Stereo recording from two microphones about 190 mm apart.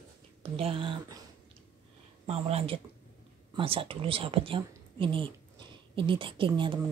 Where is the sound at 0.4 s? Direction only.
30° right (ahead or behind).